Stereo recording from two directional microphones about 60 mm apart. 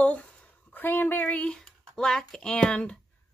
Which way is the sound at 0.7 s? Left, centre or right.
Left.